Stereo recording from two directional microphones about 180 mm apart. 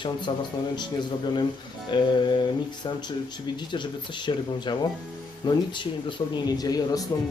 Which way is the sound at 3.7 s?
25° left (ahead or behind).